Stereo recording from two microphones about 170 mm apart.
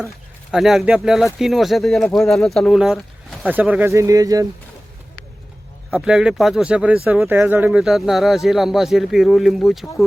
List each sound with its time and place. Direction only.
0.5 s speech: centre (ahead or behind); by 4.4 s 20° right (ahead or behind)
5.9 s speech: 5° right (ahead or behind)